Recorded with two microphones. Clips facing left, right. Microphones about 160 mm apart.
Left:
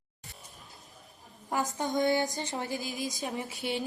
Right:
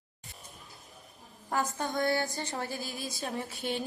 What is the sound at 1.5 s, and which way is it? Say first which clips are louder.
A woman's voice: left 1 dB; 15° left (ahead or behind).